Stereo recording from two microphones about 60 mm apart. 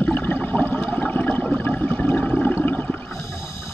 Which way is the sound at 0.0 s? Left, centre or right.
Left.